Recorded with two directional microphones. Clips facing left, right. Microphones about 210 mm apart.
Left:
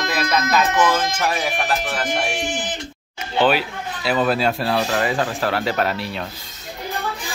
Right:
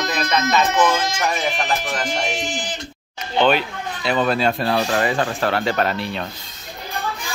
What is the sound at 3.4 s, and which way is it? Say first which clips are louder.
Speech: right 1 dB; 5° left (ahead or behind).